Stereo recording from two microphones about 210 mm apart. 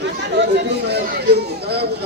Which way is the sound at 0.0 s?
55° right (ahead or behind).